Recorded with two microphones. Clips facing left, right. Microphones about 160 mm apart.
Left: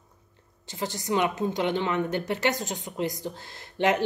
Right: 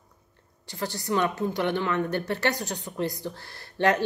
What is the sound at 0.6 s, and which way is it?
A woman's voice, 20° left (ahead or behind).